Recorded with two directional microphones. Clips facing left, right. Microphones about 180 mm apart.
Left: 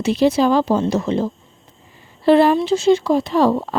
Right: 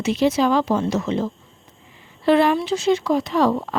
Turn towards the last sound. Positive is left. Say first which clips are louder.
# left 3 dB
turn(degrees=30)  # may be behind; listen again after turning